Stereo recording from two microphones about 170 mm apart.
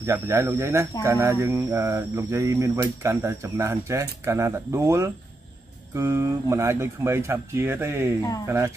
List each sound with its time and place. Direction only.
0.0 s speech: 15° right (ahead or behind)